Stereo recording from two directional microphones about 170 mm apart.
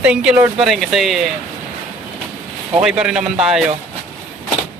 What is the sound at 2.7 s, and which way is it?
Speech, 5° right (ahead or behind).